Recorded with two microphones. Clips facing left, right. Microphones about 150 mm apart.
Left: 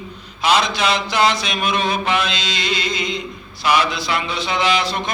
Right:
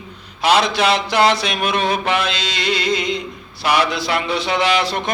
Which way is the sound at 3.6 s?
65° right (ahead or behind).